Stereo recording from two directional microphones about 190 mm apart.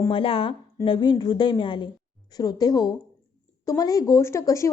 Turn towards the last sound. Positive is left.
turn(degrees=15)  # may be behind; listen again after turning